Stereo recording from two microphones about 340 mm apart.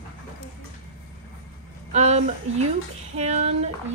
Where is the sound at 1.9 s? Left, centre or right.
Centre.